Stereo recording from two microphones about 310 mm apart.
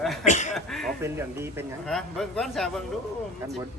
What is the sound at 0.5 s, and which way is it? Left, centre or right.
Speech, centre.